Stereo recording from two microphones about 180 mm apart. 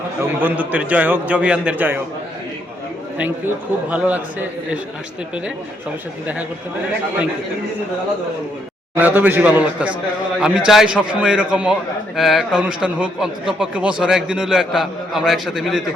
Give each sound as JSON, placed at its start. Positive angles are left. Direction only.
{"t": 0.2, "sound": "a man's voice", "side_deg": -10}
{"t": 3.8, "sound": "a man's voice", "side_deg": -10}
{"t": 9.0, "sound": "a man's voice", "side_deg": -10}